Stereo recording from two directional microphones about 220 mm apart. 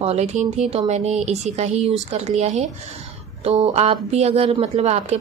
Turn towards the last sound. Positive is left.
turn(degrees=-30)  # may be behind; listen again after turning